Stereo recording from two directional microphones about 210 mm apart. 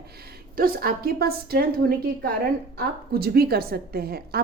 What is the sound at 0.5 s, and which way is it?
A woman's voice, 45° right (ahead or behind).